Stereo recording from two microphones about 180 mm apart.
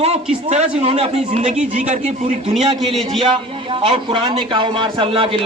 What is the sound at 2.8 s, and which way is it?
Speech, centre (ahead or behind).